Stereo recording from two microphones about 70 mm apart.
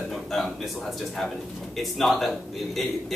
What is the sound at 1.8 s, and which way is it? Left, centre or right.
A man's voice, centre.